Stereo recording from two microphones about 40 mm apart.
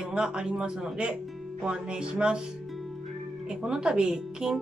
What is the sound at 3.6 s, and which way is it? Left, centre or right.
Speech, centre.